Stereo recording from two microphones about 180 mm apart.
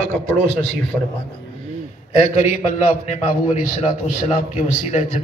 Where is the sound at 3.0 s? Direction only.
40° left (ahead or behind).